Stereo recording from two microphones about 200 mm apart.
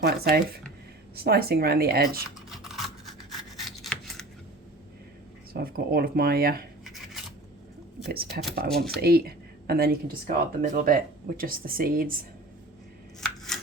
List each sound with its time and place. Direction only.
0.0 s speech: 50° right (ahead or behind)
5.5 s speech: 50° right (ahead or behind)
6.8 s a sound: centre (ahead or behind)
8.0 s speech: 50° right (ahead or behind)
8.7 s speech: centre (ahead or behind)
9.0 s speech: 50° right (ahead or behind)
13.2 s a sound: centre (ahead or behind)